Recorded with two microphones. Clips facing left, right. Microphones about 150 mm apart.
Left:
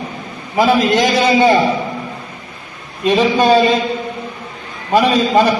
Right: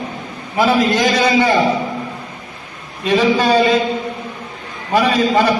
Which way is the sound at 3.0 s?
20° left (ahead or behind).